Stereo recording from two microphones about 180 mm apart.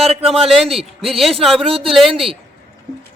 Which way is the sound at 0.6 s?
30° right (ahead or behind).